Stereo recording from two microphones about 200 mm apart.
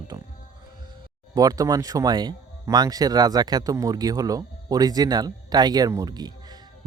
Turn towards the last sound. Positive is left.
turn(degrees=-20)  # may be behind; listen again after turning